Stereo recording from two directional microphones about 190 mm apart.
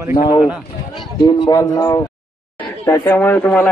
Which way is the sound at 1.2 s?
20° left (ahead or behind).